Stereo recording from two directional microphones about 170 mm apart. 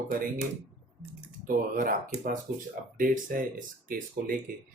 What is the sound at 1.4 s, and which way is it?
Speech, 55° right (ahead or behind).